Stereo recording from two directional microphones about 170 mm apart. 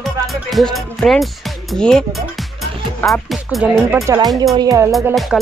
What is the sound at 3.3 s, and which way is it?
Speech, 5° right (ahead or behind).